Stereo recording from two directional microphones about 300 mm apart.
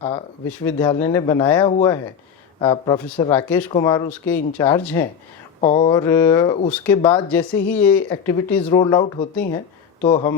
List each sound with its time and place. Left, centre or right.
0.4 s speech: centre
5.5 s speech: left